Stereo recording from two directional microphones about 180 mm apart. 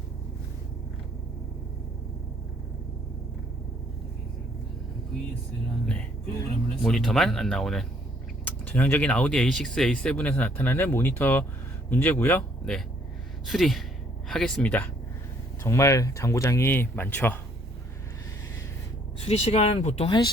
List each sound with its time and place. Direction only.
5.8 s speech: 5° left (ahead or behind)
19.2 s speech: 35° left (ahead or behind)
20.1 s speech: 25° left (ahead or behind)